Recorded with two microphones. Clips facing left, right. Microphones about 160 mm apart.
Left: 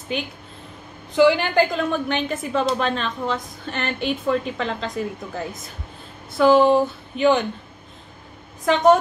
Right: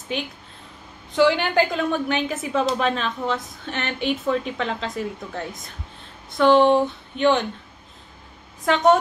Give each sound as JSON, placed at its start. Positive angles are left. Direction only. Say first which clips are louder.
{"t": 1.1, "sound": "a woman's voice", "louder": "left 2 dB", "side_deg": 0}
{"t": 8.6, "sound": "a woman's voice", "louder": "left 2 dB", "side_deg": 0}